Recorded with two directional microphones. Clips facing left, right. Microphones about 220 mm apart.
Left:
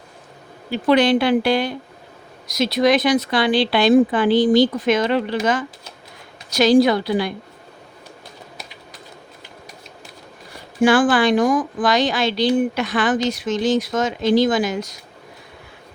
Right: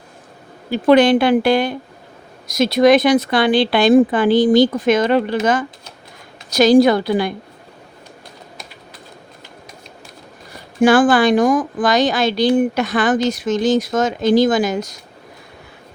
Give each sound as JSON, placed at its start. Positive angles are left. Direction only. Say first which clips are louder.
{"t": 0.7, "sound": "speech", "louder": "right 4 dB", "side_deg": -50}
{"t": 10.8, "sound": "speech", "louder": "right 3 dB", "side_deg": -45}